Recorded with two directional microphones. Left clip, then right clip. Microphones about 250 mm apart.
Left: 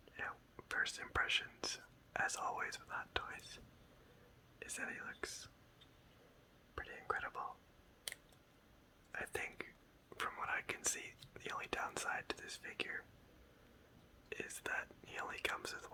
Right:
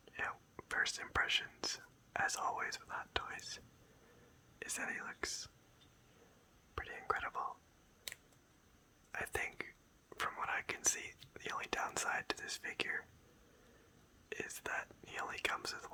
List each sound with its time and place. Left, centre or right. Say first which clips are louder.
0.2 s speech: right 4 dB; centre
4.6 s speech: right 3 dB; centre
6.7 s whispering: right 3 dB; centre
9.1 s whispering: right 3 dB; centre
10.1 s speech: right 2 dB; centre
14.3 s speech: right 1 dB; centre